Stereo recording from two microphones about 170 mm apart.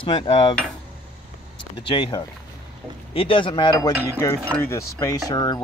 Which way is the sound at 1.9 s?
25° left (ahead or behind).